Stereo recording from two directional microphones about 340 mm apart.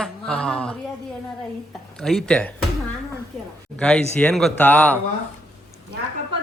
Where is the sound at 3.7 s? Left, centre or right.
Centre.